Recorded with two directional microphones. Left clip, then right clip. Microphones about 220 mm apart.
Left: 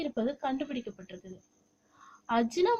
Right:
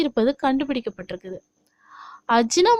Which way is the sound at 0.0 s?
45° right (ahead or behind).